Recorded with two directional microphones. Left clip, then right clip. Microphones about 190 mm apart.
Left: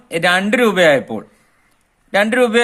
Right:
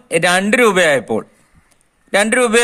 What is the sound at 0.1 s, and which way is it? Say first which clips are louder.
A man's voice: right 1 dB; 25° right (ahead or behind).